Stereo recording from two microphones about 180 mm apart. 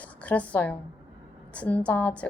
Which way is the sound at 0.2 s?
10° left (ahead or behind).